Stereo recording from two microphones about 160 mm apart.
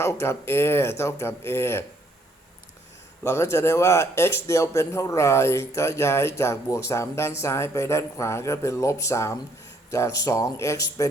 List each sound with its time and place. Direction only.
0.0 s a man's voice: 15° left (ahead or behind)
3.2 s a man's voice: 15° left (ahead or behind)